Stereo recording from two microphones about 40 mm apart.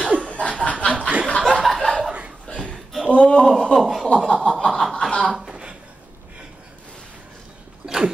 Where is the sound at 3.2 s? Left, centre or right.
Left.